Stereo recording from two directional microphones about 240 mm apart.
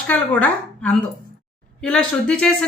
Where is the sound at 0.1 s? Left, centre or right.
Centre.